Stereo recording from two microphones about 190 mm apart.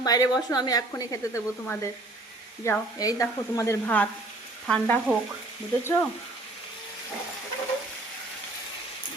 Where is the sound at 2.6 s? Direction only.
15° left (ahead or behind).